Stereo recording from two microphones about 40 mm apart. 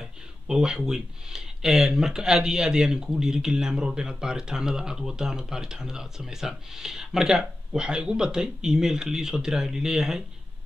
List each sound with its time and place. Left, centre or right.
0.0 s speech: centre